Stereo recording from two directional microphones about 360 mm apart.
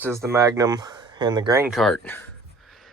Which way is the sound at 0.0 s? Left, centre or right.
Centre.